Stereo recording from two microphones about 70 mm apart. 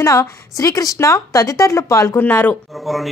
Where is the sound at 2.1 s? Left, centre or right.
Left.